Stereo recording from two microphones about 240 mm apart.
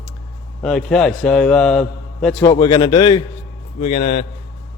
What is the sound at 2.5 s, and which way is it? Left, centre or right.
A man's voice, centre.